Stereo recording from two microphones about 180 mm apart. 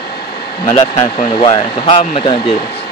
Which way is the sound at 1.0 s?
25° left (ahead or behind).